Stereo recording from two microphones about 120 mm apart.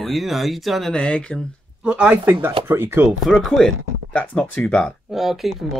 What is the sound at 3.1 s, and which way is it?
Speech, centre (ahead or behind).